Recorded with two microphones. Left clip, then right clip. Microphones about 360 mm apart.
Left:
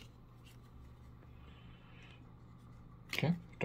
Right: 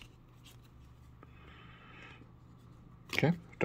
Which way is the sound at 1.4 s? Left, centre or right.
Centre.